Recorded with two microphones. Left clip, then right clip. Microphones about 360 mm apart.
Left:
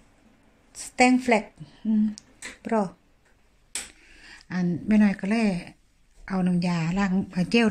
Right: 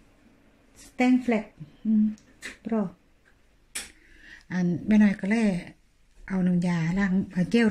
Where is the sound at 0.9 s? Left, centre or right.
Left.